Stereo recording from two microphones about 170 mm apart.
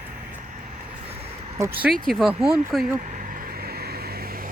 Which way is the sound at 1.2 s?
35° right (ahead or behind).